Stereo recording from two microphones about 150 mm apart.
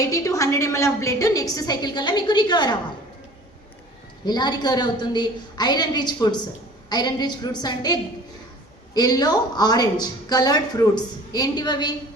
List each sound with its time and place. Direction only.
0.0 s a woman's voice: 20° left (ahead or behind)
4.3 s a woman's voice: 30° left (ahead or behind)
9.0 s a woman's voice: 25° left (ahead or behind)